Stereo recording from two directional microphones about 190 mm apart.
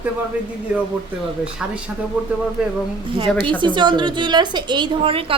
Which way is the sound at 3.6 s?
25° right (ahead or behind).